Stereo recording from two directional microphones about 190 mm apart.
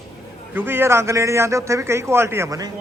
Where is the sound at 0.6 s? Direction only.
10° right (ahead or behind).